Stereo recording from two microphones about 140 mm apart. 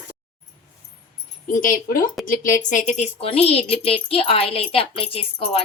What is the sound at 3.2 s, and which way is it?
Speech, 45° left (ahead or behind).